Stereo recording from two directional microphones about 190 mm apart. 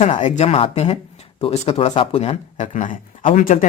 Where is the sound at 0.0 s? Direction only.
35° left (ahead or behind).